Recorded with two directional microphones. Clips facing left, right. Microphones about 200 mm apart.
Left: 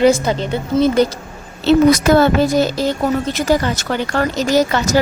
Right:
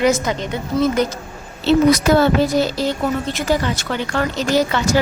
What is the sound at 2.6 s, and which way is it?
A woman's voice, 45° left (ahead or behind).